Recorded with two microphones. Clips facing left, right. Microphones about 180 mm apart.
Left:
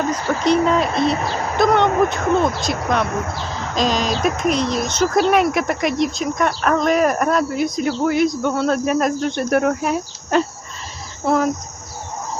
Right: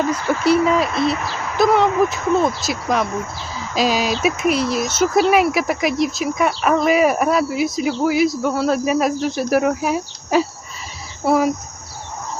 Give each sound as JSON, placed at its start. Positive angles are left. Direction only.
{"t": 0.4, "sound": "speech", "side_deg": -5}
{"t": 1.1, "sound": "a woman's voice", "side_deg": 35}
{"t": 1.5, "sound": "speech", "side_deg": -5}